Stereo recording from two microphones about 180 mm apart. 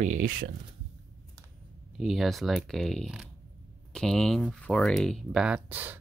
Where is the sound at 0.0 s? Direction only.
45° right (ahead or behind).